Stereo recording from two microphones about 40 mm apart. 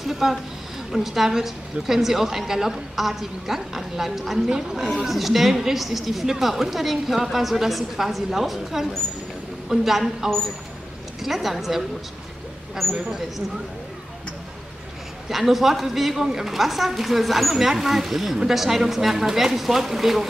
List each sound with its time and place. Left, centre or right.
0.0 s a woman's voice: centre
4.5 s speech: centre
5.0 s a woman's voice: centre
12.8 s a woman's voice: centre
15.2 s a woman's voice: centre